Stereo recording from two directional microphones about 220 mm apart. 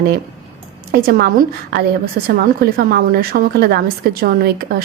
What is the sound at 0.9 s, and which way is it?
A woman's voice, 45° right (ahead or behind).